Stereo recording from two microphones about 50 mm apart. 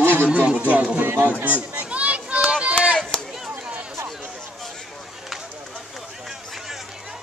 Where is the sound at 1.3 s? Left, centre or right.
Right.